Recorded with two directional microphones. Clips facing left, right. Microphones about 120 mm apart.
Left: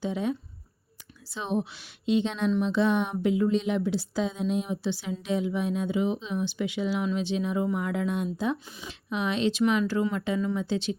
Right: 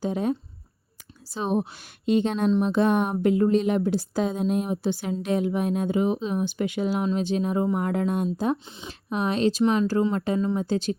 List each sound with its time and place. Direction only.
0.0 s speech: 45° right (ahead or behind)